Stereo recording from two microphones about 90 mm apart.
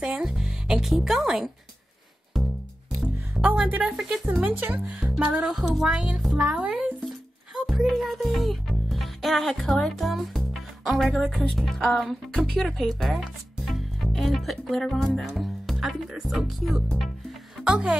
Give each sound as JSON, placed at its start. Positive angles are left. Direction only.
{"t": 0.0, "sound": "speech", "side_deg": -5}
{"t": 2.3, "sound": "music", "side_deg": 0}
{"t": 3.4, "sound": "music", "side_deg": -15}
{"t": 4.3, "sound": "speech", "side_deg": -20}
{"t": 5.5, "sound": "speech", "side_deg": -5}
{"t": 7.5, "sound": "music", "side_deg": -5}
{"t": 10.9, "sound": "speech", "side_deg": 5}